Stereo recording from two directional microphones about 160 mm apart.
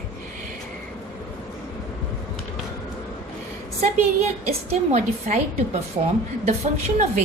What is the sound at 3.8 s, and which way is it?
A woman's voice, 40° right (ahead or behind).